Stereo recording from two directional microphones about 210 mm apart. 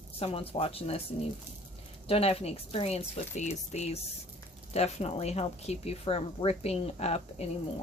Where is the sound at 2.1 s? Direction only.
30° left (ahead or behind).